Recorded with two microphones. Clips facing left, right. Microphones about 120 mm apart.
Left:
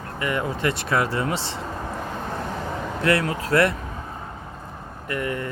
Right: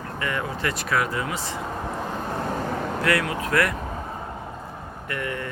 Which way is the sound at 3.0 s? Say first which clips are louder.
Left 4 dB; 30° left (ahead or behind).